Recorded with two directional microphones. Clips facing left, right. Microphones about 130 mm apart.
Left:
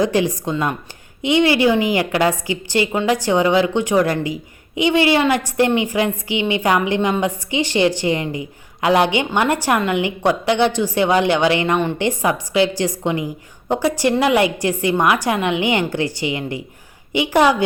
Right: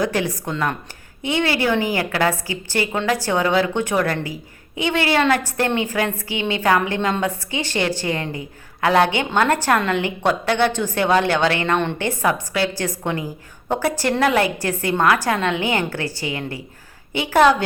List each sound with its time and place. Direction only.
0.0 s a woman's voice: 20° left (ahead or behind)